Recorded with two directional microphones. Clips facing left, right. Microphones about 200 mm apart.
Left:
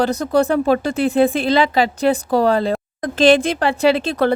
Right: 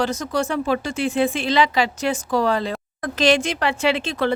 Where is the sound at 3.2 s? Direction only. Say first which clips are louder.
Left 5 dB; 55° left (ahead or behind).